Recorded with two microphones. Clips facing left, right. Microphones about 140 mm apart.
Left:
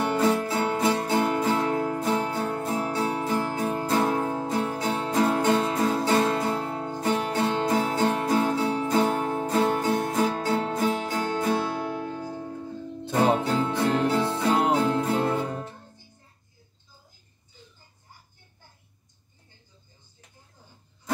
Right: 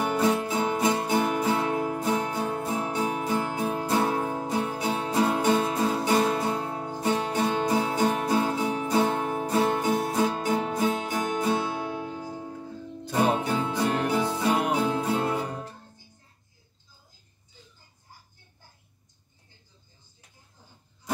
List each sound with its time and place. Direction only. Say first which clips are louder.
0.0 s music: left 1 dB; 15° right (ahead or behind)